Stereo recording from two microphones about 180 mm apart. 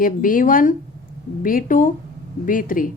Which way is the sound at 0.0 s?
50° left (ahead or behind).